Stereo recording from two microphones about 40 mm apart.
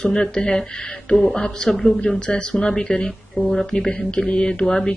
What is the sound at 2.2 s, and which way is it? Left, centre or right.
A woman's voice, left.